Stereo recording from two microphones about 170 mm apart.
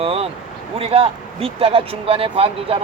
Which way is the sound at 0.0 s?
35° right (ahead or behind).